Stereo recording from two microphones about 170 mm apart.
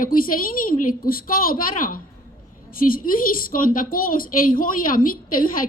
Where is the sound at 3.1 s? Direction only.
55° left (ahead or behind).